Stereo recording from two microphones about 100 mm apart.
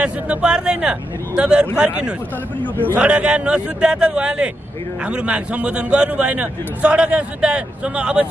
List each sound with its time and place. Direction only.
0.0 s a man's voice: 10° right (ahead or behind)